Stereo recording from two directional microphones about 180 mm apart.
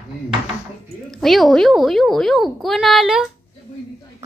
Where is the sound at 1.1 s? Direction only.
Centre (ahead or behind).